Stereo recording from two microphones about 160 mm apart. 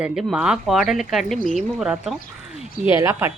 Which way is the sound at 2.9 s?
15° right (ahead or behind).